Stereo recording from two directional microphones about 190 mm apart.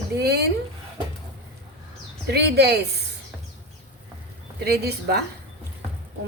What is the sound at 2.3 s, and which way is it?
Speech, 60° right (ahead or behind).